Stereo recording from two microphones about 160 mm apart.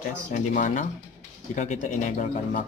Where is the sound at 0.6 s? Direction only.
55° left (ahead or behind).